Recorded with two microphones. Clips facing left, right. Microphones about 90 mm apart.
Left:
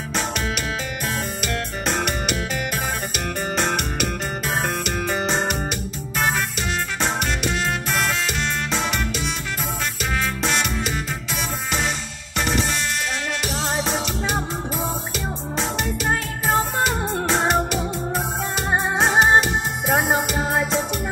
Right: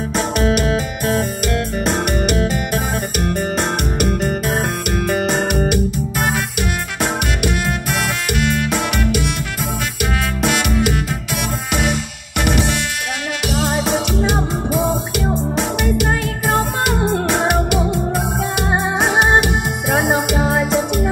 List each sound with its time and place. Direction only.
0.4 s music: 45° right (ahead or behind)
4.5 s music: 45° right (ahead or behind)
8.3 s music: 60° right (ahead or behind)
12.4 s music: 65° right (ahead or behind)
13.7 s music: 65° right (ahead or behind)
17.3 s music: 10° right (ahead or behind)
18.7 s music: 5° right (ahead or behind)